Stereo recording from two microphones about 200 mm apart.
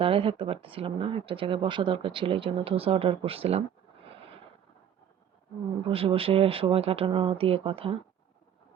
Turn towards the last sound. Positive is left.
turn(degrees=-30)  # may be behind; listen again after turning